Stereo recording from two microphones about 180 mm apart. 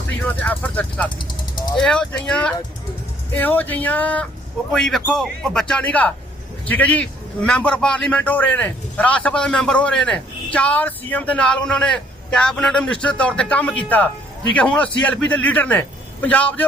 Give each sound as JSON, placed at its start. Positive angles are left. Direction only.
{"t": 0.2, "sound": "vehicle", "side_deg": 10}
{"t": 1.8, "sound": "a man's voice", "side_deg": 5}